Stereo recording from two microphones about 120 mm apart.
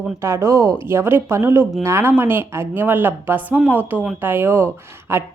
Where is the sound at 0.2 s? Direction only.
25° right (ahead or behind).